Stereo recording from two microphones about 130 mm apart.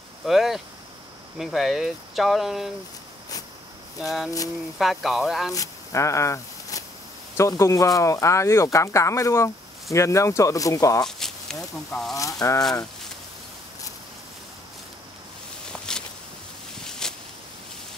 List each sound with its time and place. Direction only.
0.2 s speech: centre (ahead or behind)
4.0 s speech: centre (ahead or behind)
5.5 s speech: 25° left (ahead or behind)
11.1 s speech: 5° left (ahead or behind)
12.2 s speech: 25° left (ahead or behind)
17.0 s a sound: 5° left (ahead or behind)